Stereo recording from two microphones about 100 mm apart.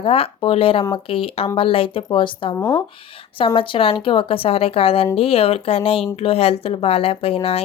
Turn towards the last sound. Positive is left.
turn(degrees=75)  # may be behind; listen again after turning